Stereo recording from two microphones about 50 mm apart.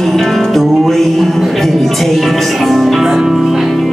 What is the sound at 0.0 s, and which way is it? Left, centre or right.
Music, centre.